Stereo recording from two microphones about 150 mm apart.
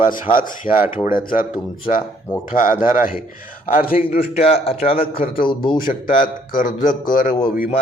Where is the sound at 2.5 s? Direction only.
60° left (ahead or behind).